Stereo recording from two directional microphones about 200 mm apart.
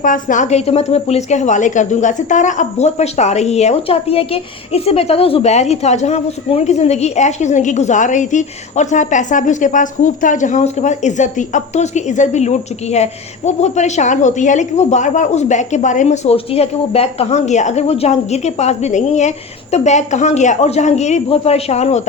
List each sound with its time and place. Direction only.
0.0 s a woman's voice: 40° left (ahead or behind)